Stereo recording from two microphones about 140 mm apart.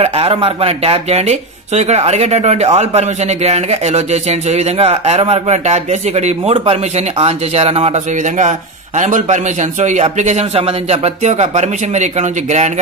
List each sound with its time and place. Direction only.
0.0 s a man's voice: 45° right (ahead or behind)